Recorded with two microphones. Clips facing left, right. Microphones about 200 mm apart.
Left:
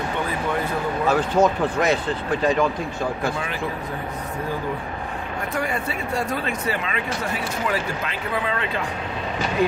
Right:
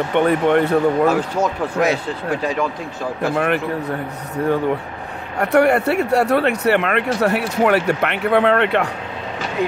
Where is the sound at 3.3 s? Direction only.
60° right (ahead or behind).